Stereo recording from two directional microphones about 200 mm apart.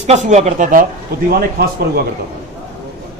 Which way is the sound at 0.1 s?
35° right (ahead or behind).